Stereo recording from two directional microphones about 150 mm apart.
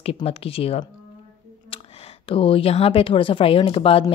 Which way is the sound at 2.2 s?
35° left (ahead or behind).